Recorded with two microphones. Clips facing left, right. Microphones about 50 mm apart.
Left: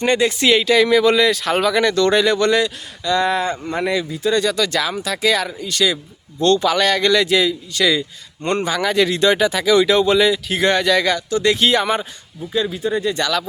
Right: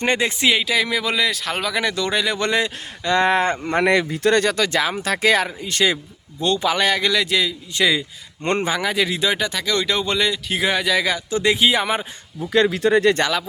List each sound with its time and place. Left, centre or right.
0.0 s speech: right
0.4 s speech: centre
1.8 s a man's voice: centre
2.4 s speech: right
3.7 s speech: right
4.4 s speech: right
6.4 s a man's voice: centre
7.7 s speech: centre
8.9 s speech: centre
9.5 s speech: centre
11.3 s speech: right
11.5 s a man's voice: centre
12.5 s speech: right